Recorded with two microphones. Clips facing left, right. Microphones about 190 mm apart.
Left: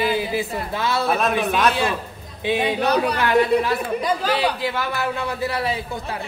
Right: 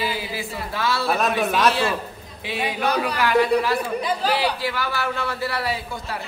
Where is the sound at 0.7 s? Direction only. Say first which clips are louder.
Left 1 dB; 20° left (ahead or behind).